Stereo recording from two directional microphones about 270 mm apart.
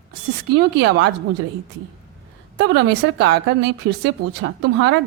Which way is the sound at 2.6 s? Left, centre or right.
Right.